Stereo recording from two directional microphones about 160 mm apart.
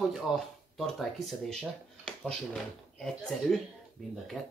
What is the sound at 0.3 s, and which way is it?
Speech, 5° right (ahead or behind).